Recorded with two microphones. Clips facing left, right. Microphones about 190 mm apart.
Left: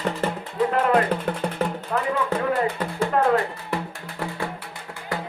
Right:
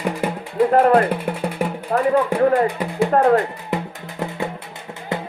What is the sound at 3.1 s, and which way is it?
Music, 45° right (ahead or behind).